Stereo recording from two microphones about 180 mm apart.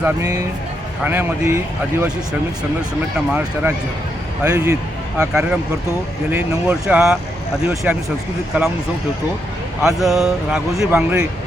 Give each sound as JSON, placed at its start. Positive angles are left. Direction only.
{"t": 0.0, "sound": "speech", "side_deg": -20}
{"t": 3.2, "sound": "speech", "side_deg": -10}
{"t": 5.3, "sound": "speech", "side_deg": -5}
{"t": 10.0, "sound": "speech", "side_deg": 0}